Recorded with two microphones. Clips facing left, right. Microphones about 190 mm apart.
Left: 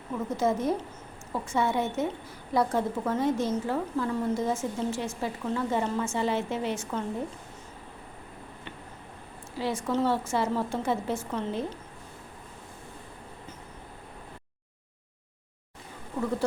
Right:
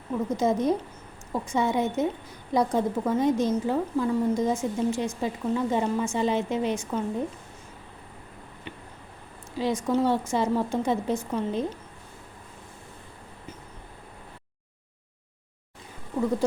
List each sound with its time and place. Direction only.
0.3 s a woman's voice: 15° right (ahead or behind)
9.6 s a woman's voice: 15° right (ahead or behind)